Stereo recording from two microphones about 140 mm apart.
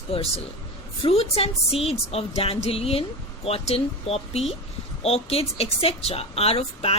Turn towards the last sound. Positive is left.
turn(degrees=45)  # may be behind; listen again after turning